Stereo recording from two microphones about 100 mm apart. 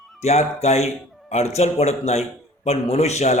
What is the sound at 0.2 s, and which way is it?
Speech, 90° left.